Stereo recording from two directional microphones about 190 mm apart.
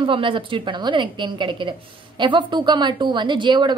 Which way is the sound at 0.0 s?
25° right (ahead or behind).